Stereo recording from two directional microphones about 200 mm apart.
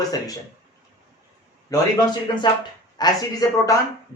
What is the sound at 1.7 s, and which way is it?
Speech, 15° left (ahead or behind).